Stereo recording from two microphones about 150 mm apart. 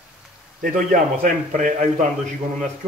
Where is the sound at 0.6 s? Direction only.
60° right (ahead or behind).